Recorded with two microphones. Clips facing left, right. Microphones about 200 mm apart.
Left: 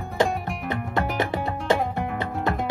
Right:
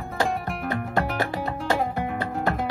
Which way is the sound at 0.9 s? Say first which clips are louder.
Left 2 dB; 20° left (ahead or behind).